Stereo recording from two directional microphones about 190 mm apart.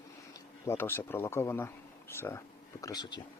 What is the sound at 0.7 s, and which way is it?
Speech, 15° left (ahead or behind).